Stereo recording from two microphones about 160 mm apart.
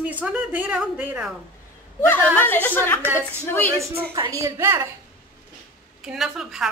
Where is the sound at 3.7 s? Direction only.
20° right (ahead or behind).